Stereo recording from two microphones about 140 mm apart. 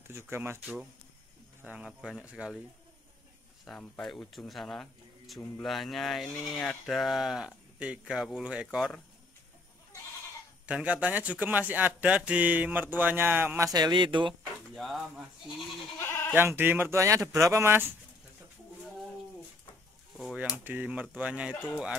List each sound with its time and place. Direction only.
0.1 s speech: 20° right (ahead or behind)
1.6 s speech: 10° right (ahead or behind)
3.6 s speech: 5° left (ahead or behind)
10.7 s speech: 10° right (ahead or behind); by 14.3 s 35° right (ahead or behind)
14.8 s speech: centre (ahead or behind)
16.0 s goat: 15° left (ahead or behind)
16.3 s speech: 15° right (ahead or behind)
20.3 s speech: 10° right (ahead or behind)